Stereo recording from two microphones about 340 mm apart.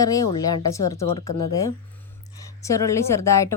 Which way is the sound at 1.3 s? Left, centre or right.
Left.